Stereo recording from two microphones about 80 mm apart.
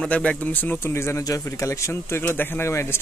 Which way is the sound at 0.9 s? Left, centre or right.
Left.